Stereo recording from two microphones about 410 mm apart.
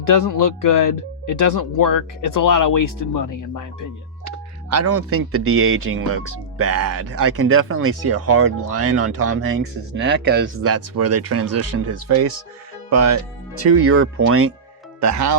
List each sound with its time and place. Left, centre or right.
0.0 s speech: left
4.7 s speech: right
15.0 s speech: right